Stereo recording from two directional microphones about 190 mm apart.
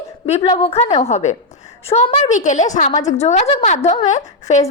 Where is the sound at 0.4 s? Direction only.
25° left (ahead or behind).